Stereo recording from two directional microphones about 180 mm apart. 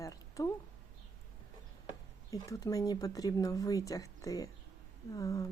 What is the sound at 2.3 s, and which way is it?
Speech, 20° left (ahead or behind).